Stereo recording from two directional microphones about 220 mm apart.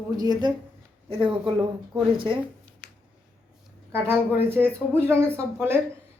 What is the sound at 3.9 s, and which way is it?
Speech, 10° right (ahead or behind).